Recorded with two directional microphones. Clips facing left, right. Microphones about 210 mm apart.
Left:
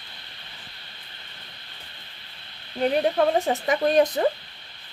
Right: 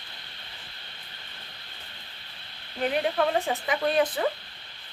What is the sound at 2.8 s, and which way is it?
Speech, 40° left (ahead or behind).